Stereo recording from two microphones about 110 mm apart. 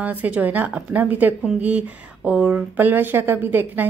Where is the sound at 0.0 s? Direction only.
15° right (ahead or behind).